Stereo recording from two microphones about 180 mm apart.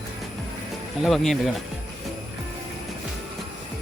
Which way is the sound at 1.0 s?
Centre (ahead or behind).